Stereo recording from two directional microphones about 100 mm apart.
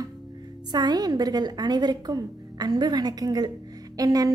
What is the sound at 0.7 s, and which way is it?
A woman's voice, 45° right (ahead or behind).